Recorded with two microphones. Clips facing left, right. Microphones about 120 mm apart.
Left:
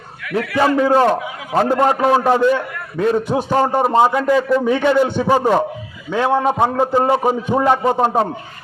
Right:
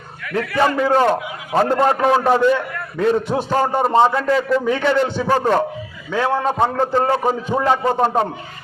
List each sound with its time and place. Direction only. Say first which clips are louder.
0.3 s a man's voice: left 2 dB; 10° left (ahead or behind)